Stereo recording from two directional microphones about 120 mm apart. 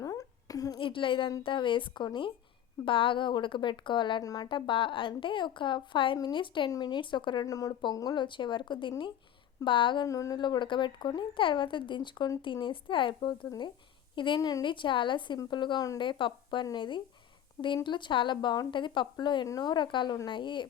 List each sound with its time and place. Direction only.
0.0 s a sound: 30° left (ahead or behind)
0.8 s a woman's voice: 45° left (ahead or behind)
4.4 s a woman's voice: 45° left (ahead or behind)
10.1 s speech: 30° left (ahead or behind)